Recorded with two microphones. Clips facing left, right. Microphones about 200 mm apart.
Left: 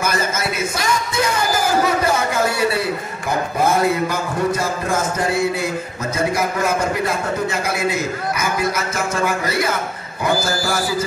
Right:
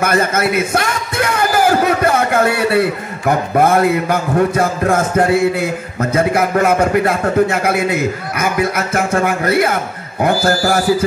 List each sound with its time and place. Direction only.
0.0 s speech: 60° right (ahead or behind)